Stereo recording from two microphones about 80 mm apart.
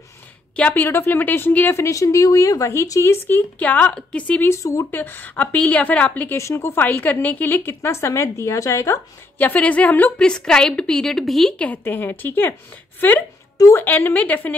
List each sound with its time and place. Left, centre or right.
0.6 s a woman's voice: left
1.8 s speech: left; by 4.2 s centre
4.5 s speech: left
4.9 s a woman's voice: left
6.3 s speech: left
9.4 s a woman's voice: centre
11.5 s a woman's voice: centre
11.8 s a woman's voice: left
13.6 s a woman's voice: left
13.8 s a woman's voice: left